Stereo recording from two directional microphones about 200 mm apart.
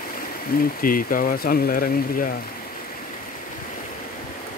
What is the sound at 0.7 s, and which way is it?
Speech, 45° left (ahead or behind).